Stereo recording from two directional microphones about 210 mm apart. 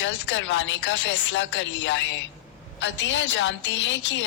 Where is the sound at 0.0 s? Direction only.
60° left (ahead or behind).